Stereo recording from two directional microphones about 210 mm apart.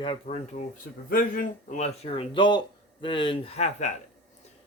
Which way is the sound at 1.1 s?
40° left (ahead or behind).